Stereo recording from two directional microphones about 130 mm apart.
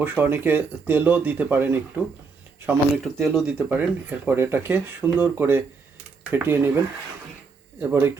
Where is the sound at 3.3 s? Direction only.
5° right (ahead or behind).